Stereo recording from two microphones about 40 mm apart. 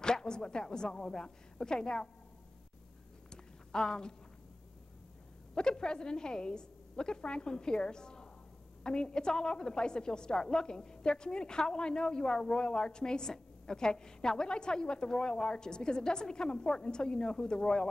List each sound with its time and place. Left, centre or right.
0.0 s a woman's voice: centre
3.3 s a sound: centre
5.5 s a woman's voice: centre